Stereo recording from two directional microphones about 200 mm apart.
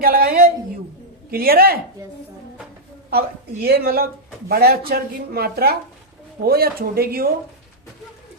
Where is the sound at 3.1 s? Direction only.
50° right (ahead or behind).